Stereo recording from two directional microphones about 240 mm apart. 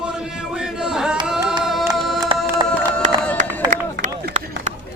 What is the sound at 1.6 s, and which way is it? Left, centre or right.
Music, centre.